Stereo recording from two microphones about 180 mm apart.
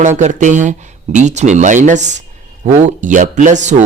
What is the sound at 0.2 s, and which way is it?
Speech, 45° right (ahead or behind).